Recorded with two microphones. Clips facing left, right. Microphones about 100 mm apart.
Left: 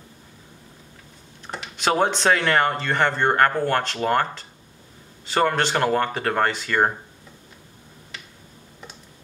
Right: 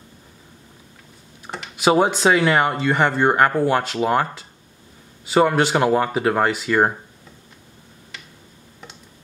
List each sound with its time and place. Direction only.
1.5 s speech: centre (ahead or behind)